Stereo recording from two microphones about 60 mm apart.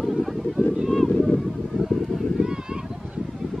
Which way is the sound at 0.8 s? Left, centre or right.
Centre.